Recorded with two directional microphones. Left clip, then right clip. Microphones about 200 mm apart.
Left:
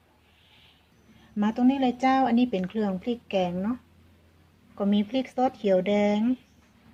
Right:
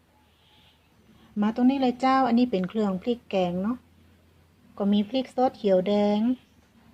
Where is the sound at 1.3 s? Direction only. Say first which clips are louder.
Even; 10° right (ahead or behind).